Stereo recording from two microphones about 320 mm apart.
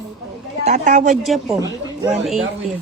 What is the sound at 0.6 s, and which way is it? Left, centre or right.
Speech, right.